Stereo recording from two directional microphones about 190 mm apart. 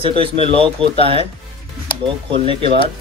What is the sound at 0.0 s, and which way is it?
A man's voice, 30° right (ahead or behind).